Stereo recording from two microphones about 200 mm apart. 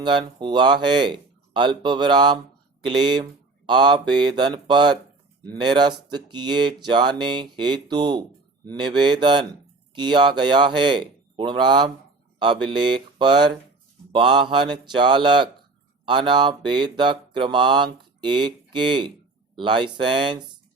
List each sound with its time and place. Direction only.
0.0 s mantra: 25° right (ahead or behind)
3.7 s mantra: 20° right (ahead or behind)
13.1 s speech: 20° right (ahead or behind)
14.1 s mantra: 25° right (ahead or behind)